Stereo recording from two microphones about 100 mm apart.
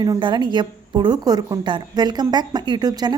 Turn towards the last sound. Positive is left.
turn(degrees=-45)  # may be behind; listen again after turning